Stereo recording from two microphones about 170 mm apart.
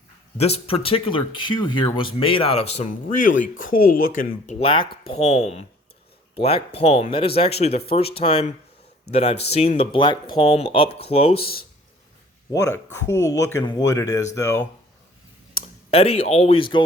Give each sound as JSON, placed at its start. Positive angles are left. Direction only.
{"t": 0.3, "sound": "speech", "side_deg": 35}
{"t": 3.2, "sound": "speech", "side_deg": 50}
{"t": 4.6, "sound": "speech", "side_deg": 30}
{"t": 12.5, "sound": "speech", "side_deg": 20}
{"t": 15.9, "sound": "speech", "side_deg": 35}